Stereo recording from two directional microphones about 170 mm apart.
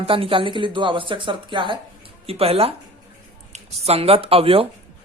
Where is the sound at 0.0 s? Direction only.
30° right (ahead or behind).